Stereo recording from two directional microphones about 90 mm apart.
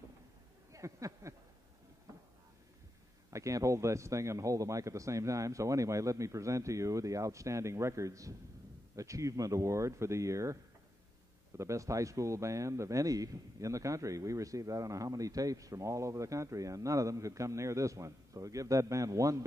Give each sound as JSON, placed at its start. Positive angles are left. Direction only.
{"t": 0.7, "sound": "speech", "side_deg": -35}
{"t": 3.3, "sound": "speech", "side_deg": -35}